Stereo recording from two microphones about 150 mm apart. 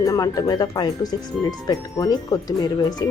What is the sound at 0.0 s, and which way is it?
Speech, 25° left (ahead or behind).